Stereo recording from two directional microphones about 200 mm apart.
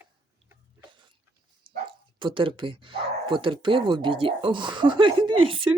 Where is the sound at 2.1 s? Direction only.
25° right (ahead or behind).